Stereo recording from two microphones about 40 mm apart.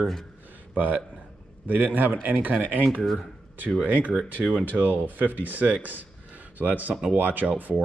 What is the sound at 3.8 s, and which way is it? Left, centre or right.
Speech, right.